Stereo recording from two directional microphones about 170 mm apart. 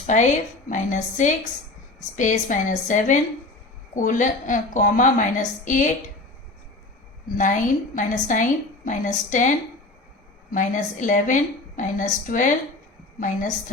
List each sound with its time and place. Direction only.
0.7 s a woman's voice: 45° left (ahead or behind)
7.3 s a woman's voice: 50° left (ahead or behind)
10.5 s a woman's voice: 50° left (ahead or behind)